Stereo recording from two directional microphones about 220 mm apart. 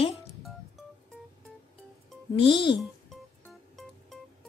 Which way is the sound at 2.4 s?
20° left (ahead or behind).